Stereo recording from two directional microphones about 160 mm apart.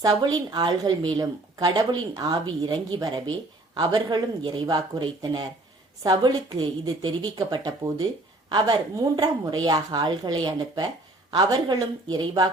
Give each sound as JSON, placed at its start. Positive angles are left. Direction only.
{"t": 0.0, "sound": "a woman's voice", "side_deg": -25}